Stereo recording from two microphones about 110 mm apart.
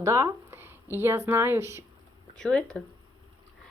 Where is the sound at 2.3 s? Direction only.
10° left (ahead or behind).